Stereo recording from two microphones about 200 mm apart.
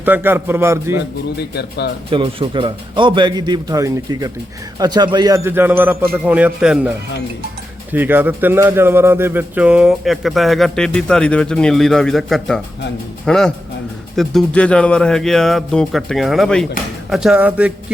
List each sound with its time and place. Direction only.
0.0 s speech: 10° right (ahead or behind)
1.4 s speech: 55° left (ahead or behind)
2.0 s a man's voice: 25° right (ahead or behind); by 6.9 s 5° right (ahead or behind)
7.9 s speech: 10° right (ahead or behind)